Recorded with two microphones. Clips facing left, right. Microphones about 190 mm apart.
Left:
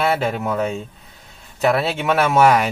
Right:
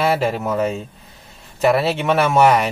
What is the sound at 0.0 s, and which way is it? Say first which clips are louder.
Speech: right 1 dB; centre (ahead or behind).